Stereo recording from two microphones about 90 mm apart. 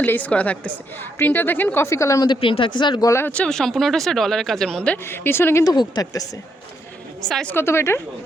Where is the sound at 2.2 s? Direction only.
70° left (ahead or behind).